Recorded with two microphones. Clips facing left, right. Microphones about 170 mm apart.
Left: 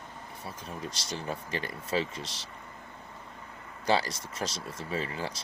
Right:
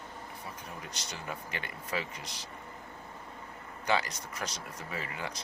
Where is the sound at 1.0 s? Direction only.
30° left (ahead or behind).